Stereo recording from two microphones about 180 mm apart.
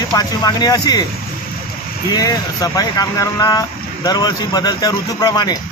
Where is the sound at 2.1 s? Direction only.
20° left (ahead or behind).